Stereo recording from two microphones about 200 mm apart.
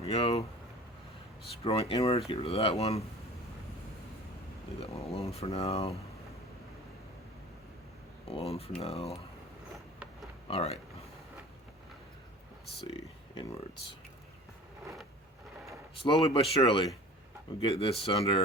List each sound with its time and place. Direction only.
0.0 s a sound: 30° left (ahead or behind)
1.6 s speech: 30° left (ahead or behind)
5.0 s speech: 30° left (ahead or behind)
8.3 s speech: 30° left (ahead or behind)
10.5 s speech: 30° left (ahead or behind)
16.0 s speech: 25° left (ahead or behind)